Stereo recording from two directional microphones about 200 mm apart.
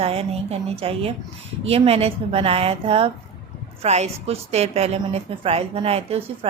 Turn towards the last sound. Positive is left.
turn(degrees=-30)  # may be behind; listen again after turning